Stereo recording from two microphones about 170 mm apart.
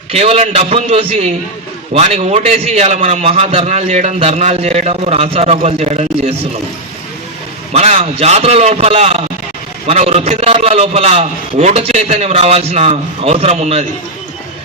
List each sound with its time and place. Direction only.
0.1 s a man's voice: 40° right (ahead or behind)
7.7 s a man's voice: 35° right (ahead or behind)